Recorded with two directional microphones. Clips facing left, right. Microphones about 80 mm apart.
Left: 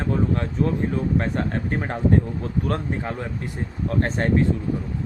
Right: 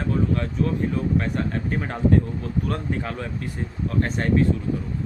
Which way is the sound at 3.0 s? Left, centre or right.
Left.